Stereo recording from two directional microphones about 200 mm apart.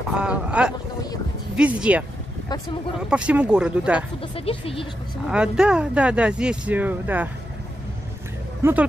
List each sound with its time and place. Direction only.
0.1 s speech: 5° right (ahead or behind)
3.1 s speech: 5° right (ahead or behind)
4.2 s speech: 25° left (ahead or behind)
5.3 s speech: 5° right (ahead or behind)
8.6 s speech: 10° right (ahead or behind)